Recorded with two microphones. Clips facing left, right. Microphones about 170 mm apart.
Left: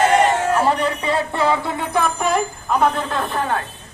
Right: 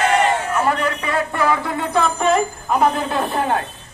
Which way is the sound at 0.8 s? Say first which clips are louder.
Left 1 dB; 30° left (ahead or behind).